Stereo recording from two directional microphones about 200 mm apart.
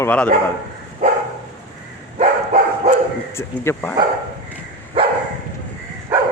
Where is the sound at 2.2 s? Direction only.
35° right (ahead or behind).